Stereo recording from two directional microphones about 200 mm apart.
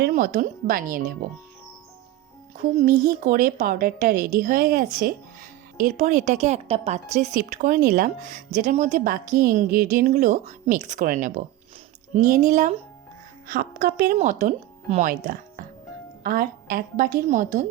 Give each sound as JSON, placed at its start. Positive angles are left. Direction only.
{"t": 0.0, "sound": "speech", "side_deg": -45}
{"t": 2.6, "sound": "a woman's voice", "side_deg": -40}